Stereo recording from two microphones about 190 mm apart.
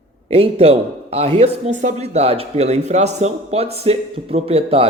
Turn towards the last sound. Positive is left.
turn(degrees=-30)  # may be behind; listen again after turning